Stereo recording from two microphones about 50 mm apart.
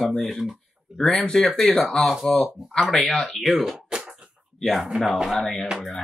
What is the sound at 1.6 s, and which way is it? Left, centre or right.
Speech, centre.